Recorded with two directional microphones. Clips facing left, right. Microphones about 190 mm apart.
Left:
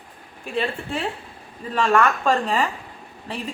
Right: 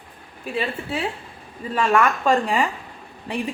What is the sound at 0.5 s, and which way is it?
A woman's voice, 5° right (ahead or behind).